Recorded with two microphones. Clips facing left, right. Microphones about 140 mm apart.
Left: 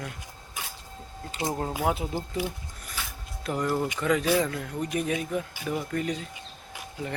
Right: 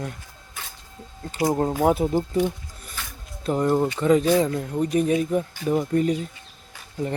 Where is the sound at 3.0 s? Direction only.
5° left (ahead or behind).